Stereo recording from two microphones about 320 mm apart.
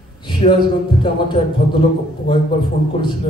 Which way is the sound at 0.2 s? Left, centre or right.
Centre.